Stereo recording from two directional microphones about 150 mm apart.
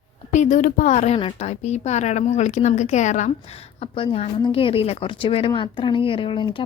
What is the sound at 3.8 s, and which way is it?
A woman's voice, 35° left (ahead or behind).